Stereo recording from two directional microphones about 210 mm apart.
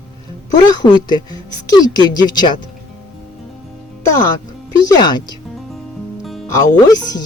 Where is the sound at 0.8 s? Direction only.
20° left (ahead or behind).